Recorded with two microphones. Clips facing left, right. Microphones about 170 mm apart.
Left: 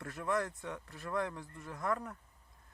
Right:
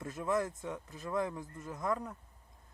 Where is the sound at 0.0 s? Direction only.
20° right (ahead or behind).